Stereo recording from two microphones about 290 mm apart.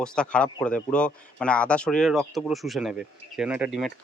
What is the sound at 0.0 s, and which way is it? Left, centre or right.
Speech, centre.